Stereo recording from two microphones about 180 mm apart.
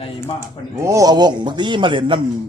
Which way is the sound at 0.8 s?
20° right (ahead or behind).